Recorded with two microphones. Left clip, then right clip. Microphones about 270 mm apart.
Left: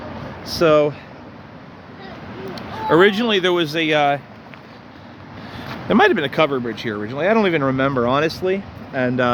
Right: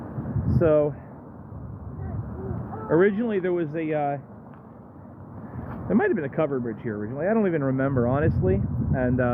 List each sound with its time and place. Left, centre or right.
0.6 s speech: centre
2.9 s speech: left
5.9 s speech: left